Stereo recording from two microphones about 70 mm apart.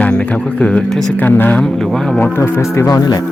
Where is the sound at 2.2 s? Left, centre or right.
Left.